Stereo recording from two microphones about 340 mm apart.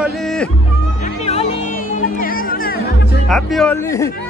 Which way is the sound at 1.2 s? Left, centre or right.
Centre.